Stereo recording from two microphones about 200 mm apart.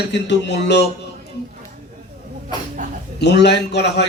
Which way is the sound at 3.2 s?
55° left (ahead or behind).